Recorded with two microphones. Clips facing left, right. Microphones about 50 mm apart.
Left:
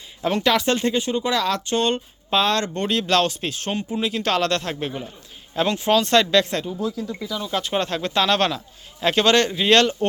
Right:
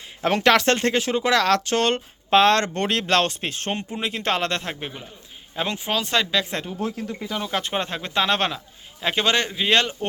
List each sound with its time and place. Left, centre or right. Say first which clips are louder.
0.3 s speech: right 2 dB; right
2.3 s speech: right 4 dB; right
3.0 s speech: left 2 dB; right; by 6.5 s centre
6.5 s speech: left 2 dB; right
7.7 s speech: left 3 dB; centre